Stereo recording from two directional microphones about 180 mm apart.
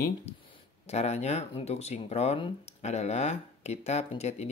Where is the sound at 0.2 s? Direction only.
35° left (ahead or behind).